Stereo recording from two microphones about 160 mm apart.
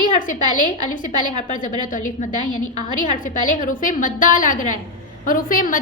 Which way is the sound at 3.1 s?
55° left (ahead or behind).